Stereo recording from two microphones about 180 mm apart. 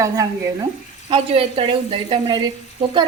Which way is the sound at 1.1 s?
30° right (ahead or behind).